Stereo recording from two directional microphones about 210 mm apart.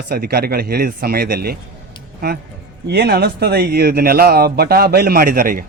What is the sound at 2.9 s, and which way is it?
Speech, 50° right (ahead or behind).